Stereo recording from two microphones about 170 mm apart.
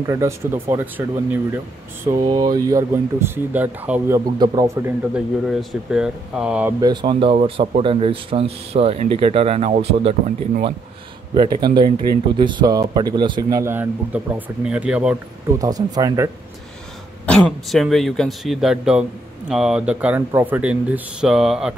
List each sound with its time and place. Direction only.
0.0 s speech: 15° right (ahead or behind)
2.2 s speech: 25° right (ahead or behind)
5.1 s speech: centre (ahead or behind)
6.8 s speech: 25° right (ahead or behind); by 15.1 s 5° right (ahead or behind)
15.6 s speech: 20° right (ahead or behind)
17.3 s speech: centre (ahead or behind)